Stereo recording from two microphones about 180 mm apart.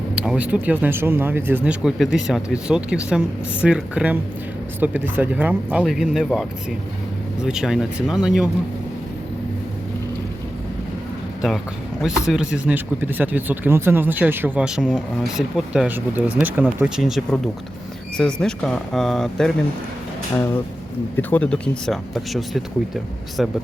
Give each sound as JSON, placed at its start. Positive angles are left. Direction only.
{"t": 0.2, "sound": "speech", "side_deg": -5}
{"t": 12.0, "sound": "speech", "side_deg": -5}
{"t": 20.3, "sound": "speech", "side_deg": 15}